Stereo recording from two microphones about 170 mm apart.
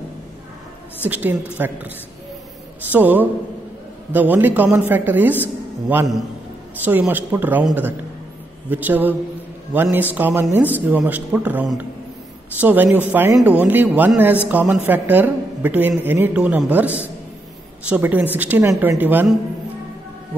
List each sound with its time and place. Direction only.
1.0 s speech: 10° right (ahead or behind)
2.9 s speech: 10° right (ahead or behind)
6.8 s a woman's voice: 10° right (ahead or behind)